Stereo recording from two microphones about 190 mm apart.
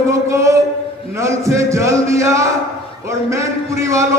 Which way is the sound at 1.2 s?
15° right (ahead or behind).